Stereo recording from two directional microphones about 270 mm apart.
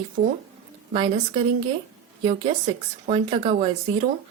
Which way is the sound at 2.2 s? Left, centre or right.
Centre.